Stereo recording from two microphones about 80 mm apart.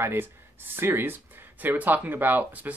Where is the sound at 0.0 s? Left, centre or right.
Right.